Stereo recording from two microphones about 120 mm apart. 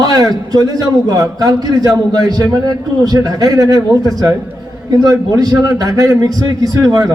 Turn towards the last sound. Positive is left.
turn(degrees=-30)  # may be behind; listen again after turning